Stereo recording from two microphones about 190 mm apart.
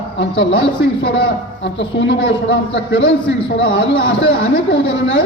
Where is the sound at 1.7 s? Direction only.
60° left (ahead or behind).